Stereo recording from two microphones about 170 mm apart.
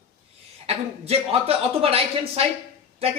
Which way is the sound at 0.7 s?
35° right (ahead or behind).